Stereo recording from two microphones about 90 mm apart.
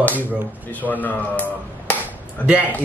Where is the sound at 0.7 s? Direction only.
20° left (ahead or behind).